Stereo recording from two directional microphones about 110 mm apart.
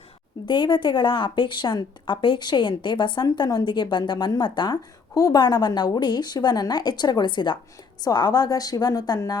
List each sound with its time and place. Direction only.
0.4 s a woman's voice: 45° left (ahead or behind)